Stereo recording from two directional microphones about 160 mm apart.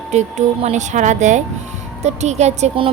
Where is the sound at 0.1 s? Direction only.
45° right (ahead or behind).